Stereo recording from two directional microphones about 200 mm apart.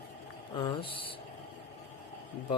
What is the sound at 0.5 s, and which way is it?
Speech, 25° left (ahead or behind).